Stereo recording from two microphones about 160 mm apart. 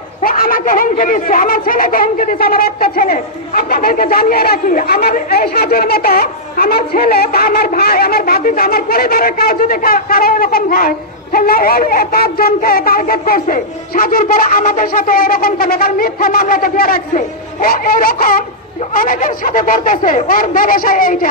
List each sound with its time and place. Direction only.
0.2 s speech: 60° left (ahead or behind)